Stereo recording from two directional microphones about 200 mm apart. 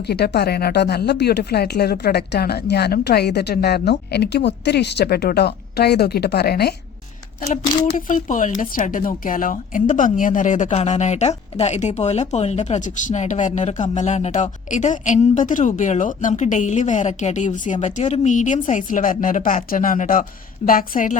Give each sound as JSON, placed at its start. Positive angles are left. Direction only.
{"t": 0.1, "sound": "speech", "side_deg": 55}
{"t": 7.6, "sound": "speech", "side_deg": 25}
{"t": 7.9, "sound": "speech", "side_deg": 40}